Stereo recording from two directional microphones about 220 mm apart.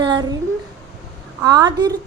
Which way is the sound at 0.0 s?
20° right (ahead or behind).